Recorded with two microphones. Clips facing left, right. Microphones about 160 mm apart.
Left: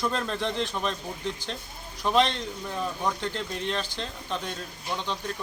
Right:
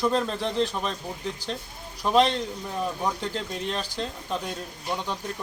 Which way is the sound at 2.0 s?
5° right (ahead or behind).